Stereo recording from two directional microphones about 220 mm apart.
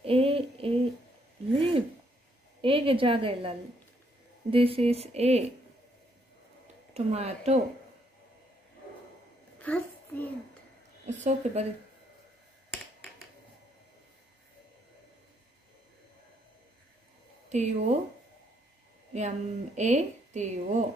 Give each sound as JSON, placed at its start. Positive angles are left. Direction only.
{"t": 0.0, "sound": "a sound", "side_deg": -25}
{"t": 2.6, "sound": "a woman's voice", "side_deg": -25}
{"t": 6.9, "sound": "speech", "side_deg": -30}
{"t": 9.6, "sound": "a sound", "side_deg": 5}
{"t": 11.1, "sound": "a woman's voice", "side_deg": -30}
{"t": 17.5, "sound": "a woman's voice", "side_deg": -30}
{"t": 19.1, "sound": "a woman's voice", "side_deg": -30}